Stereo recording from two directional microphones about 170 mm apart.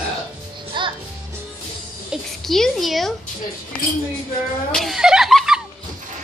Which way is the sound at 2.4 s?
Centre (ahead or behind).